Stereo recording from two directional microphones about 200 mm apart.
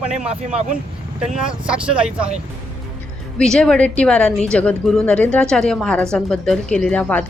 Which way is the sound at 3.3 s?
5° left (ahead or behind).